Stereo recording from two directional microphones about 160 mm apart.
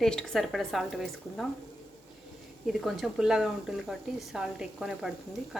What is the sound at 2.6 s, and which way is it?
Speech, centre (ahead or behind).